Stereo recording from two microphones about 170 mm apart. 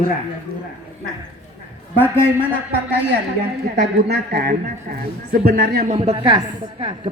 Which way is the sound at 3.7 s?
70° right (ahead or behind).